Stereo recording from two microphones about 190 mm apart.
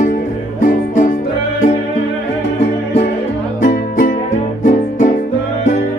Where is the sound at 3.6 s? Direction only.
45° left (ahead or behind).